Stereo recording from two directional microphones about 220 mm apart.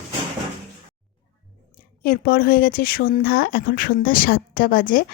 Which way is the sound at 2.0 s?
45° left (ahead or behind).